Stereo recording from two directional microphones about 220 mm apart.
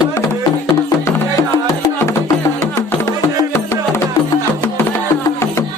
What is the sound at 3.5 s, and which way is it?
Music, 10° left (ahead or behind).